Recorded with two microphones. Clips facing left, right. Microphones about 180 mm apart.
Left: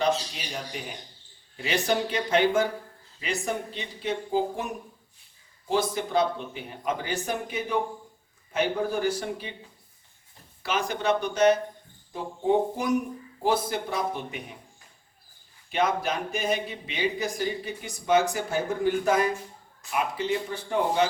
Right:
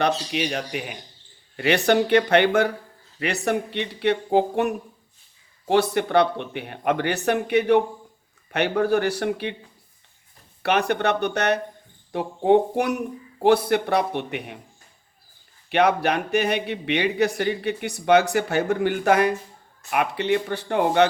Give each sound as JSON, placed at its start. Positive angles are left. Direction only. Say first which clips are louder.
{"t": 0.0, "sound": "speech", "louder": "right 4 dB", "side_deg": -70}
{"t": 10.6, "sound": "speech", "louder": "right 7 dB", "side_deg": -65}
{"t": 15.7, "sound": "speech", "louder": "right 6 dB", "side_deg": -70}